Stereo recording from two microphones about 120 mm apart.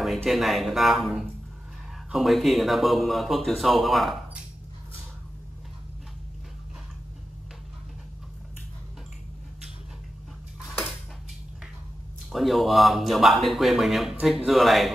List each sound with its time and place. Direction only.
0.0 s speech: centre (ahead or behind)
12.3 s speech: centre (ahead or behind)